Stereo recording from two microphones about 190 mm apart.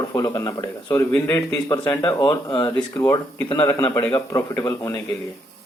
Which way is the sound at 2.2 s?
25° left (ahead or behind).